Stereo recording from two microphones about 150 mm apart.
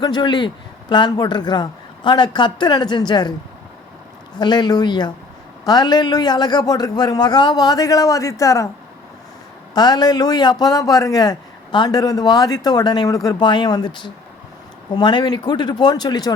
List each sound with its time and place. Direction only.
0.0 s a man's voice: 30° left (ahead or behind)
4.4 s a man's voice: 30° left (ahead or behind)
9.7 s a man's voice: 25° left (ahead or behind)